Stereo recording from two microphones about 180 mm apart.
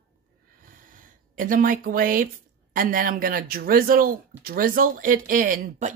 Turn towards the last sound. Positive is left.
turn(degrees=-45)  # may be behind; listen again after turning